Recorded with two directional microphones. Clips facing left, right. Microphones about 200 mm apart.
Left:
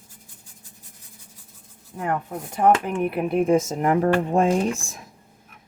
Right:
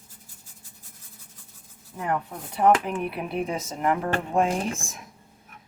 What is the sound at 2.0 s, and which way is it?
Speech, 45° left (ahead or behind).